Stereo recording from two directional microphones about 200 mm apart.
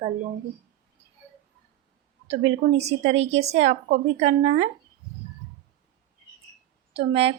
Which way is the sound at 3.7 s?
55° right (ahead or behind).